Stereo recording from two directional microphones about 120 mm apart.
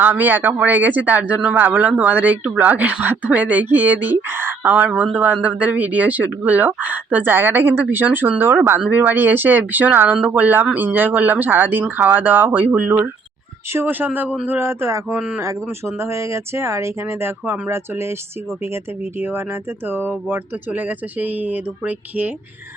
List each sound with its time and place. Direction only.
0.0 s speech: 15° right (ahead or behind)
19.9 s speech: 15° right (ahead or behind)